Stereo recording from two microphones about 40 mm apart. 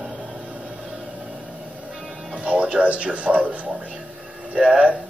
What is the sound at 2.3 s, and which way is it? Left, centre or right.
Music, right.